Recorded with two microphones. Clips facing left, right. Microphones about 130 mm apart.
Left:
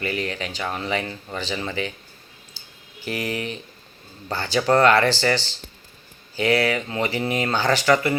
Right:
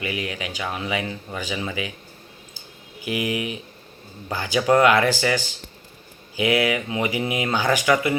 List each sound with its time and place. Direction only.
0.0 s speech: 10° right (ahead or behind)
3.0 s speech: 10° right (ahead or behind)